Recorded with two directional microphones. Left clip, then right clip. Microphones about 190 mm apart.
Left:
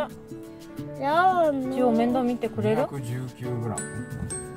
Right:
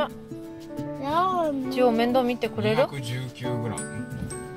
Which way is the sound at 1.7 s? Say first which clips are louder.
Right 2 dB; 15° right (ahead or behind).